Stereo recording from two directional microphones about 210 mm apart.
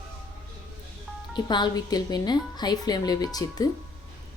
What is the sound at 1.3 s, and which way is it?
A woman's voice, 20° left (ahead or behind).